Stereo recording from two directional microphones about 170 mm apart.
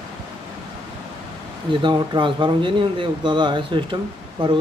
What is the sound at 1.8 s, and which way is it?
Speech, 30° right (ahead or behind).